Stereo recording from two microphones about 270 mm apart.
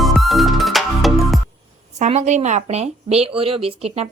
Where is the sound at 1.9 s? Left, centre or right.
Right.